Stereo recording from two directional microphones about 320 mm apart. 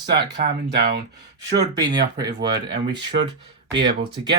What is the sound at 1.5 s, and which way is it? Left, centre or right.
Speech, centre.